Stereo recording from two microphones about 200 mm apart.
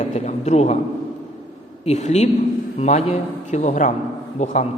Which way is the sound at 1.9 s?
35° left (ahead or behind).